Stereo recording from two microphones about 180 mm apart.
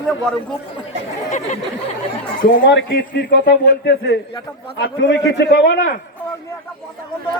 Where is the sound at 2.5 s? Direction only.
80° left.